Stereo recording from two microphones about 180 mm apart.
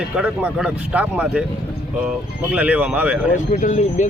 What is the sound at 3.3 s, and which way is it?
Speech, 40° left (ahead or behind).